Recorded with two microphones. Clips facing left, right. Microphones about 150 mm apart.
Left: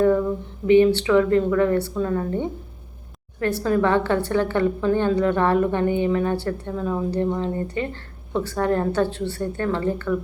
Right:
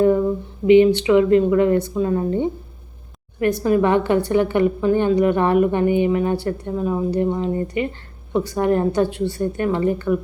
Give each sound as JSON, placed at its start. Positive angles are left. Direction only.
{"t": 0.7, "sound": "a woman's voice", "side_deg": -15}